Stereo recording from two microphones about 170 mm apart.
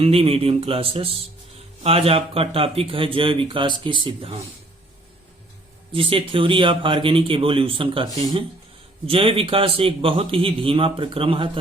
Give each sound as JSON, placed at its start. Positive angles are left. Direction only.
{"t": 0.0, "sound": "speech", "side_deg": -35}
{"t": 5.9, "sound": "speech", "side_deg": -30}